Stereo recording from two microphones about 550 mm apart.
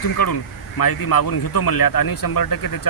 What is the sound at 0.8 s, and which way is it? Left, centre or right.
Speech, left.